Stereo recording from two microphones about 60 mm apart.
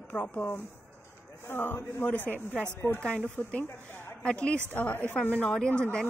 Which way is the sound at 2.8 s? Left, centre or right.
Left.